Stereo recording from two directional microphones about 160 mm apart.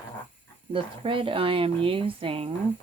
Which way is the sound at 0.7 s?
35° right (ahead or behind).